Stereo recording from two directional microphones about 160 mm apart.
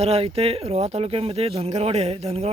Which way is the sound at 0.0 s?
40° right (ahead or behind).